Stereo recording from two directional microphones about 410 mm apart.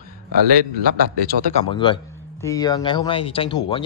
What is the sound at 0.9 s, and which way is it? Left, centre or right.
Speech, right.